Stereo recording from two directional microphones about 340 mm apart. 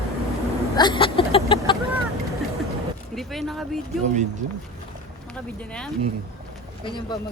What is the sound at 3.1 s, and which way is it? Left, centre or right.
Speech, centre.